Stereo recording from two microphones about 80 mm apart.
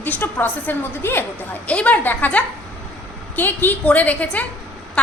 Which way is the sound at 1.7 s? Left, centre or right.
Centre.